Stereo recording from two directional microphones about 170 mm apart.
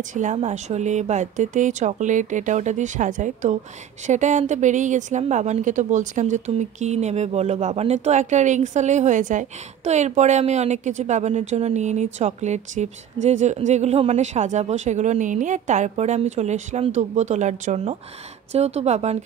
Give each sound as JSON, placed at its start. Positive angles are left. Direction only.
{"t": 0.1, "sound": "a woman's voice", "side_deg": -45}